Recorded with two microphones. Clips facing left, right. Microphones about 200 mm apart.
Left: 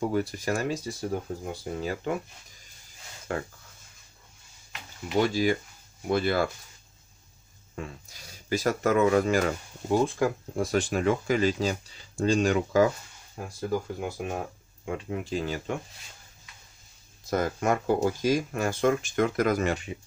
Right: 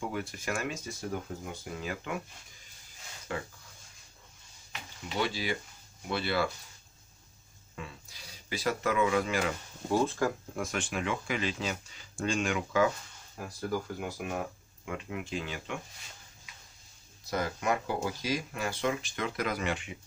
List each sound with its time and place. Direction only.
0.1 s speech: 35° left (ahead or behind)
3.3 s speech: 45° left (ahead or behind)
5.2 s speech: 45° left (ahead or behind)
7.7 s speech: 45° left (ahead or behind)
9.9 s speech: 15° left (ahead or behind)
10.5 s speech: 35° left (ahead or behind)
13.6 s speech: 25° left (ahead or behind); by 15.8 s 40° left (ahead or behind)
17.2 s speech: 50° left (ahead or behind)